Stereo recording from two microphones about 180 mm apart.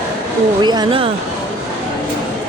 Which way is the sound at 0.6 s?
25° right (ahead or behind).